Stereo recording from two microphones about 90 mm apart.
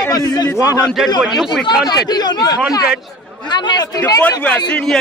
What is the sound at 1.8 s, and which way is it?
Speech, 50° left (ahead or behind).